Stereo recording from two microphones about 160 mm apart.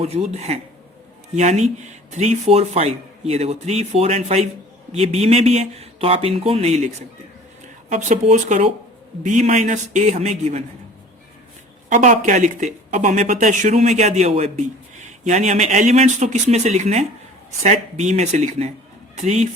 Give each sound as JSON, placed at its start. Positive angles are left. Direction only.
{"t": 0.0, "sound": "speech", "side_deg": -40}
{"t": 11.9, "sound": "speech", "side_deg": -55}